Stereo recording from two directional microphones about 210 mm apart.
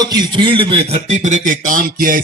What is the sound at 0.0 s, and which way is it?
Speech, 20° right (ahead or behind).